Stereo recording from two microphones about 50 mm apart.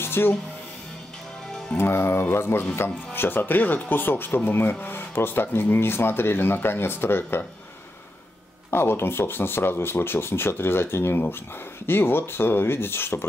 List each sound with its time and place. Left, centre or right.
0.0 s music: left
1.8 s speech: left
8.6 s speech: left